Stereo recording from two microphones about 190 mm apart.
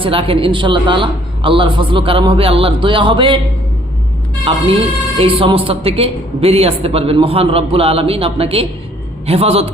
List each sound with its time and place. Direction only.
0.0 s a woman's voice: 30° right (ahead or behind)
4.5 s a woman's voice: 25° right (ahead or behind)